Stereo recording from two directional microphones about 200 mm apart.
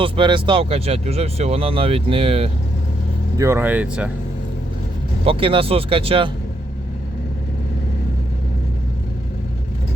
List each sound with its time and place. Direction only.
0.0 s speech: 25° right (ahead or behind)
3.3 s speech: 15° right (ahead or behind)
5.2 s speech: 25° right (ahead or behind)